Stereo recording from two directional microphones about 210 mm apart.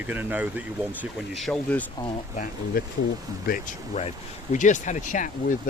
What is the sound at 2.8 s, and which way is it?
Speech, 45° left (ahead or behind).